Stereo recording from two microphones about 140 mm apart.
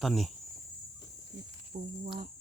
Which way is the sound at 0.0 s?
Centre (ahead or behind).